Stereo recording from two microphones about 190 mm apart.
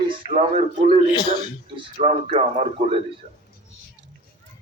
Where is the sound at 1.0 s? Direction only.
25° left (ahead or behind).